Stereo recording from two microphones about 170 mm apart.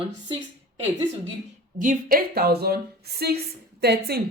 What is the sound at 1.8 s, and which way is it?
A woman's voice, 55° right (ahead or behind).